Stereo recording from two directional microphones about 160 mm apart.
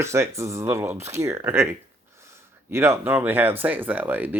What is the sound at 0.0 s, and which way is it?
Speech, 15° right (ahead or behind).